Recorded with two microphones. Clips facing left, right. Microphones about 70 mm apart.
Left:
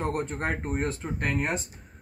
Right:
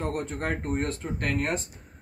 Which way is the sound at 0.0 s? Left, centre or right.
Left.